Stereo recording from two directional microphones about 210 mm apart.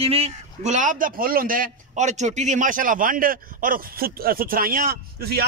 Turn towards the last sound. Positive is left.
turn(degrees=-45)  # may be behind; listen again after turning